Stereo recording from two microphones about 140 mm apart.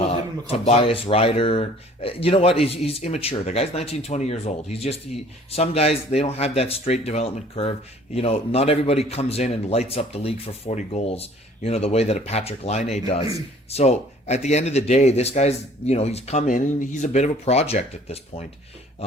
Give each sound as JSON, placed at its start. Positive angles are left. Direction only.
{"t": 0.6, "sound": "speech", "side_deg": 45}